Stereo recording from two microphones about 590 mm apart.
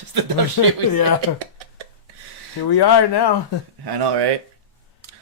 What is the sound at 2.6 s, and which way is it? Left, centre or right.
Speech, left.